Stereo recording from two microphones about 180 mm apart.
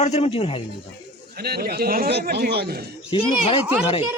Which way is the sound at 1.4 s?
60° right (ahead or behind).